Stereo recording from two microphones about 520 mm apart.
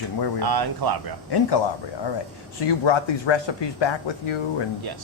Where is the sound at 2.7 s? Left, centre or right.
Left.